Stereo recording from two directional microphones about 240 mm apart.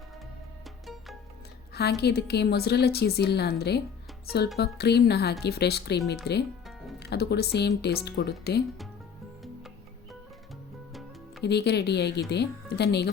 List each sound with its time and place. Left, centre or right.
1.7 s a woman's voice: left
9.4 s music: centre
11.4 s a woman's voice: left